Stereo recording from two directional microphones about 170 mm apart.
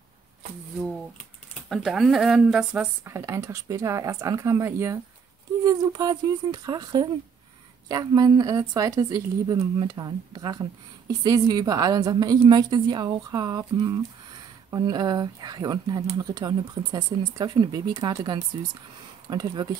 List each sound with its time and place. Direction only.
1.7 s speech: centre (ahead or behind)
3.1 s a woman's voice: 15° right (ahead or behind)